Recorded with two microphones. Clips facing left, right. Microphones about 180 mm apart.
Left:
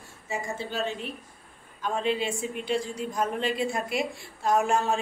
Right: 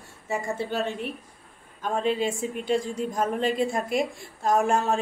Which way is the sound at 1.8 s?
45° right (ahead or behind).